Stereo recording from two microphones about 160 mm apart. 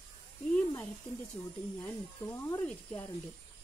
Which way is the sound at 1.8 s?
10° left (ahead or behind).